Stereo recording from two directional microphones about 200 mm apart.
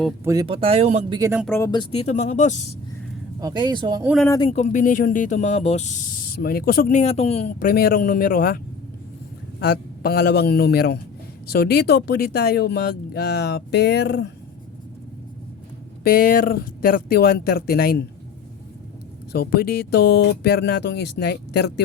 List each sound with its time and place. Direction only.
0.3 s speech: 20° right (ahead or behind)
1.2 s speech: 10° right (ahead or behind)
1.5 s speech: 15° left (ahead or behind)
1.9 s speech: 30° left (ahead or behind)
3.4 s speech: 20° right (ahead or behind)
4.3 s speech: 25° left (ahead or behind)
4.5 s speech: 40° left (ahead or behind); by 14.3 s 55° left (ahead or behind)
16.0 s speech: 45° left (ahead or behind)
19.3 s speech: 50° left (ahead or behind)